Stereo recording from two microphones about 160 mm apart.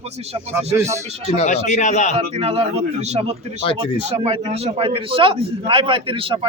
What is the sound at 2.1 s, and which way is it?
A man's voice, 40° right (ahead or behind).